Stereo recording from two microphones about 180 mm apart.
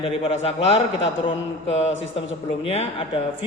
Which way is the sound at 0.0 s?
35° left (ahead or behind).